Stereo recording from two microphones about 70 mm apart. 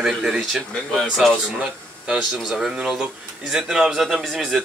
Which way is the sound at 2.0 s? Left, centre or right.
Centre.